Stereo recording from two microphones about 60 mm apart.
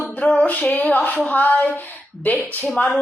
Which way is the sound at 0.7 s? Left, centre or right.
Left.